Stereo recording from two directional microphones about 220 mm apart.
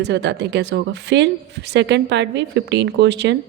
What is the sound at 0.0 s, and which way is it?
Speech, 55° right (ahead or behind).